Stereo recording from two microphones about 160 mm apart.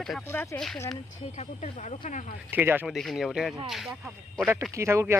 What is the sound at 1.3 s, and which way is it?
Speech, 45° left (ahead or behind).